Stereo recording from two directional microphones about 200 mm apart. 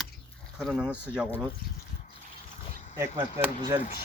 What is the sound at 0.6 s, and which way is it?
Speech, centre (ahead or behind).